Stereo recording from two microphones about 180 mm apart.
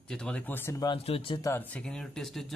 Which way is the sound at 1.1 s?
30° left (ahead or behind).